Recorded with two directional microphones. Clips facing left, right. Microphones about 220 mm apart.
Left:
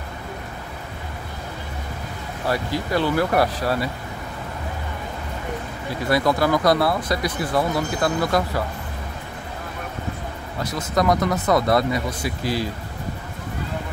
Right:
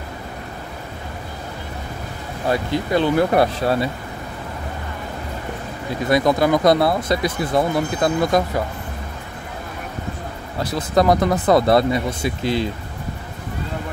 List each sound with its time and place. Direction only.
2.4 s speech: 20° right (ahead or behind)
6.0 s speech: 20° right (ahead or behind)
10.6 s speech: 30° right (ahead or behind)